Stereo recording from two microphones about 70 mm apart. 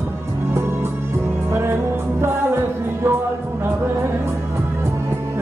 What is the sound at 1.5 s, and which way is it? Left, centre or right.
Music, right.